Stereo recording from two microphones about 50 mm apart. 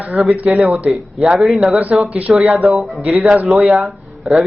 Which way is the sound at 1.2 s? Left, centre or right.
Centre.